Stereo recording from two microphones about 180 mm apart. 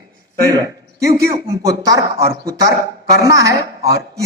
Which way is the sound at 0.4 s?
20° right (ahead or behind).